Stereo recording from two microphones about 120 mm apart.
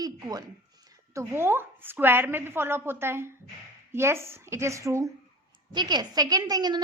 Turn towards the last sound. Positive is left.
turn(degrees=-35)  # may be behind; listen again after turning